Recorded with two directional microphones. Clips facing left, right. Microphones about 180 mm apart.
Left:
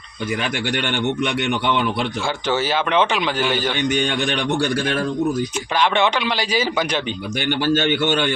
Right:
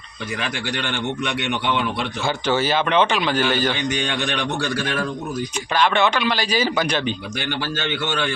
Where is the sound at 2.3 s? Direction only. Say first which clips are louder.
Right 3 dB; 15° right (ahead or behind).